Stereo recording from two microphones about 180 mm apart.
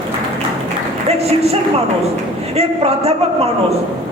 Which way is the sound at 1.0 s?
35° right (ahead or behind).